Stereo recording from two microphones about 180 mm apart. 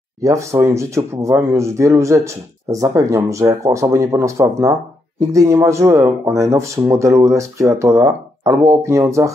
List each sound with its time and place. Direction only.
0.2 s speech: 15° right (ahead or behind)